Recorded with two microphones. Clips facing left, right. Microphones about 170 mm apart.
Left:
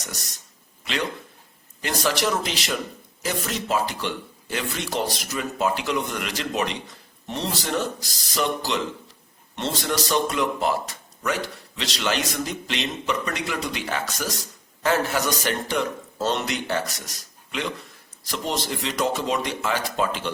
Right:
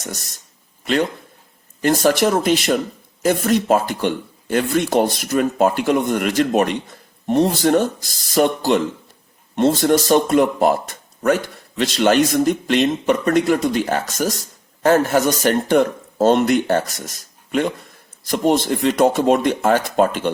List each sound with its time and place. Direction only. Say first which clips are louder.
0.0 s speech: right 6 dB; 50° right (ahead or behind)
1.8 s speech: right 9 dB; 50° right (ahead or behind)